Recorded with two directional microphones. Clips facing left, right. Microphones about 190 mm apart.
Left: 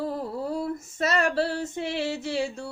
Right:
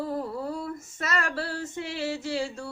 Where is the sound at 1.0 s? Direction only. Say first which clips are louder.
Left 7 dB; 25° left (ahead or behind).